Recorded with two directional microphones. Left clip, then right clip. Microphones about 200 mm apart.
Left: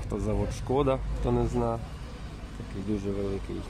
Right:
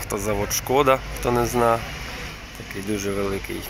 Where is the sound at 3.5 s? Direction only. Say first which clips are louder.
Right 7 dB; 5° left (ahead or behind).